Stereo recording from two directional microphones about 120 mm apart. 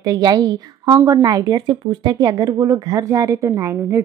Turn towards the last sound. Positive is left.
turn(degrees=-25)  # may be behind; listen again after turning